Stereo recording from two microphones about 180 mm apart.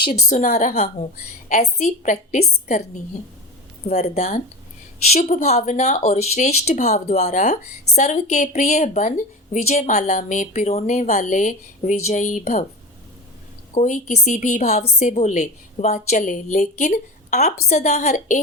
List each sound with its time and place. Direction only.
0.1 s speech: 40° left (ahead or behind)
13.7 s speech: 40° left (ahead or behind)